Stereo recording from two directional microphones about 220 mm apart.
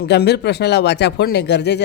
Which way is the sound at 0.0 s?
45° left (ahead or behind).